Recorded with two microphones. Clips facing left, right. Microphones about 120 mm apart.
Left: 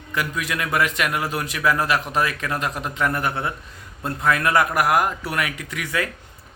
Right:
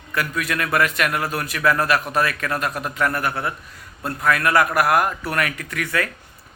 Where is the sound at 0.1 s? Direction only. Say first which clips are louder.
Right 1 dB; 15° left (ahead or behind).